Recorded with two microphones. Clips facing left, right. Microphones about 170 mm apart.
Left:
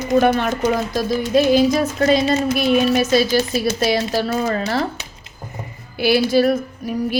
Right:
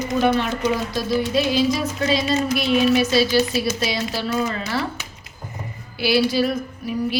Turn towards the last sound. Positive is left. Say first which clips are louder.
# left 3 dB
turn(degrees=45)  # may be behind; listen again after turning